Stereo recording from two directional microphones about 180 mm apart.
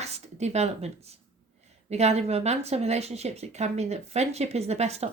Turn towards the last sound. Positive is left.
turn(degrees=-35)  # may be behind; listen again after turning